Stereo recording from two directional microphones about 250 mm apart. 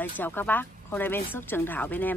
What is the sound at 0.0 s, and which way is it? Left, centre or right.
Speech, centre.